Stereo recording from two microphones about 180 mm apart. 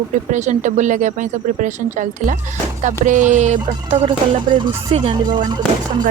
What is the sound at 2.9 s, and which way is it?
Music, 45° right (ahead or behind).